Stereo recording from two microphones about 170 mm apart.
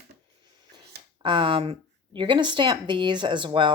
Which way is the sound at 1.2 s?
25° right (ahead or behind).